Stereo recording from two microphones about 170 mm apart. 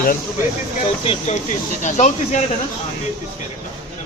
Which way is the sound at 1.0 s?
35° left (ahead or behind).